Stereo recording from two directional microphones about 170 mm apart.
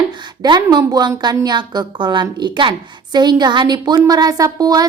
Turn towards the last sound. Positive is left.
turn(degrees=-20)  # may be behind; listen again after turning